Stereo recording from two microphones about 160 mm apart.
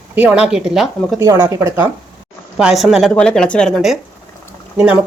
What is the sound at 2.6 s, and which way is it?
Speech, 5° right (ahead or behind).